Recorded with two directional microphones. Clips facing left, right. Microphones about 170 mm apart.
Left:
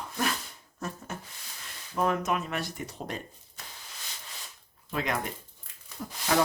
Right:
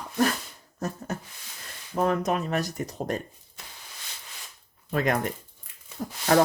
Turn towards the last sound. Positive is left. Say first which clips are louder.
# right 5 dB
turn(degrees=-40)  # may be behind; listen again after turning